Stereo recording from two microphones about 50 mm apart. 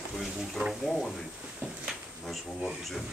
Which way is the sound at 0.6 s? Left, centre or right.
Right.